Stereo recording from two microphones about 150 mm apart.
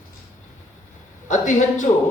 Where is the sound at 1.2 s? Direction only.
55° left (ahead or behind).